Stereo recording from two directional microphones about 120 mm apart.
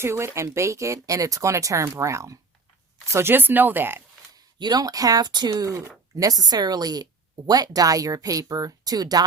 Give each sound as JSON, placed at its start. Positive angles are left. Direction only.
{"t": 0.0, "sound": "speech", "side_deg": -20}
{"t": 4.4, "sound": "a woman's voice", "side_deg": -35}